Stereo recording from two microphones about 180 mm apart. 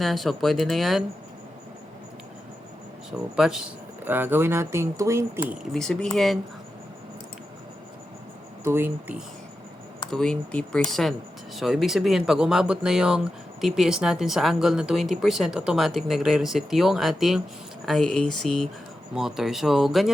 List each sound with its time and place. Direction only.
0.0 s speech: centre (ahead or behind)
3.1 s speech: 5° right (ahead or behind)
5.7 s speech: 5° left (ahead or behind)
8.6 s speech: 15° right (ahead or behind)
10.1 s speech: 5° left (ahead or behind)